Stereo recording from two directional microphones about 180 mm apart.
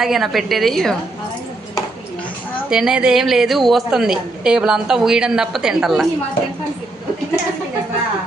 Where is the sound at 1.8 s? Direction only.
10° left (ahead or behind).